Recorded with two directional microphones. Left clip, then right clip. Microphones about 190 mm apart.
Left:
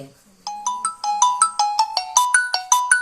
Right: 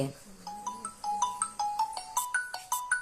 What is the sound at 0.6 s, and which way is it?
Ringtone, 50° left (ahead or behind).